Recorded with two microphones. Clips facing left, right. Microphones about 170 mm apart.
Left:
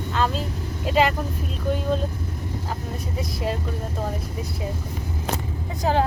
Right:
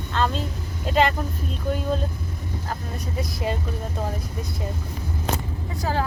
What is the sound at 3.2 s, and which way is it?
Speech, centre (ahead or behind).